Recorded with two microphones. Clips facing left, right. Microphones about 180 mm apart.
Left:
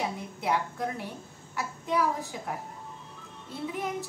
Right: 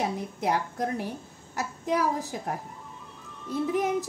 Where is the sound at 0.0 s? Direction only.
40° right (ahead or behind).